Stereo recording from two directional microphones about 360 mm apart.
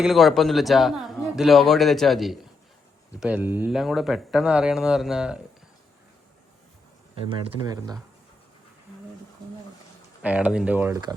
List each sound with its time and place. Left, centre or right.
0.0 s a man's voice: centre
7.3 s speech: centre
10.2 s a man's voice: centre